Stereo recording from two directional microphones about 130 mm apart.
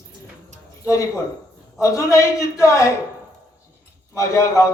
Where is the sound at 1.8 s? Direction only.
25° left (ahead or behind).